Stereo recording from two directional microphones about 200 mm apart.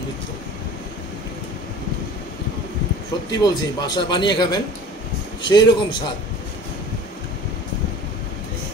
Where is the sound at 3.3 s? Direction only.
20° left (ahead or behind).